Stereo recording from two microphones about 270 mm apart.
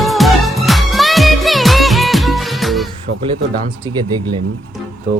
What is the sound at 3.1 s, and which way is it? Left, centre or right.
Speech, right.